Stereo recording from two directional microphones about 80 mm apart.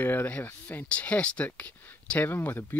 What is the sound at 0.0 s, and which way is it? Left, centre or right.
Speech, left.